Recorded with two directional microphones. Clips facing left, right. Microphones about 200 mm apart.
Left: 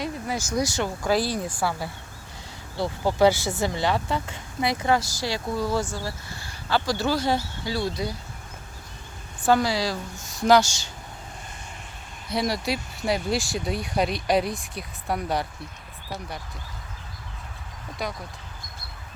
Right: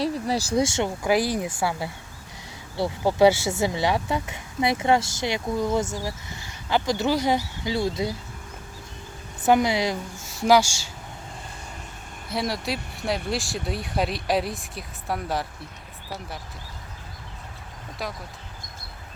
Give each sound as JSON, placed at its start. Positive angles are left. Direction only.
{"t": 0.0, "sound": "speech", "side_deg": -35}
{"t": 3.2, "sound": "speech", "side_deg": -25}
{"t": 9.4, "sound": "speech", "side_deg": -20}
{"t": 10.2, "sound": "speech", "side_deg": -10}
{"t": 12.3, "sound": "speech", "side_deg": 0}
{"t": 18.0, "sound": "speech", "side_deg": 0}